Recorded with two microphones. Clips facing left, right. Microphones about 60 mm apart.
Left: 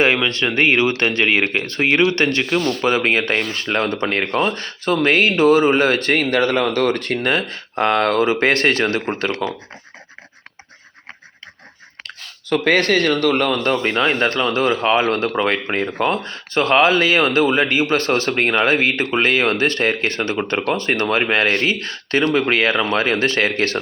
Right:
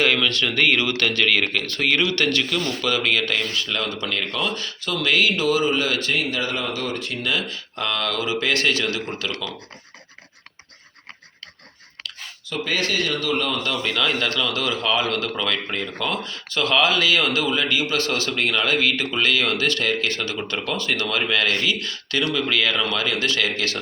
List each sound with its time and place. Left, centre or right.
0.0 s speech: left
9.3 s speech: left
12.0 s speech: left